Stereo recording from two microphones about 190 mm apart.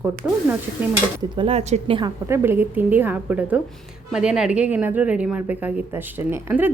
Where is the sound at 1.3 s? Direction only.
30° right (ahead or behind).